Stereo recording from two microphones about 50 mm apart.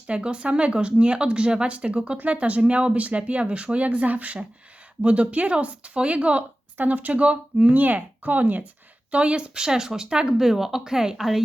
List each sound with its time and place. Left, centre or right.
0.1 s speech: right
9.1 s speech: right
10.4 s speech: centre